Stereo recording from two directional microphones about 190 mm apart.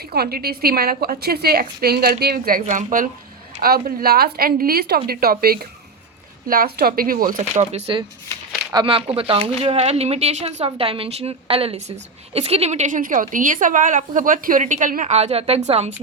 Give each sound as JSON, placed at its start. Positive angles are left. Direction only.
{"t": 0.1, "sound": "a woman's voice", "side_deg": -55}